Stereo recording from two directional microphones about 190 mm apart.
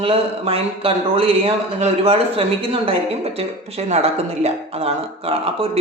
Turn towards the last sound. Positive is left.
turn(degrees=-30)  # may be behind; listen again after turning